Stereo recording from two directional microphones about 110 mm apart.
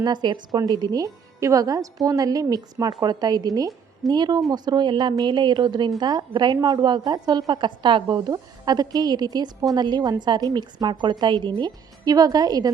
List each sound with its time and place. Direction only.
0.0 s a woman's voice: 40° right (ahead or behind)